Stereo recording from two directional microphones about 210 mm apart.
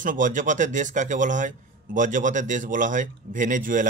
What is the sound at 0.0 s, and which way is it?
Speech, 40° right (ahead or behind).